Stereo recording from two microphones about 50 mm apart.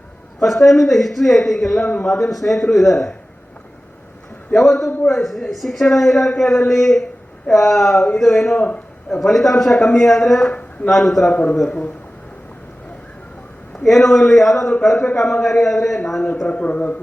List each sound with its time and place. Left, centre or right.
0.3 s a man's voice: centre
4.5 s a man's voice: centre
4.9 s a man's voice: left
5.1 s a man's voice: centre
7.9 s speech: centre
8.2 s a man's voice: centre
8.5 s speech: left
9.2 s a man's voice: centre
11.3 s speech: left
13.8 s a man's voice: centre
16.5 s speech: left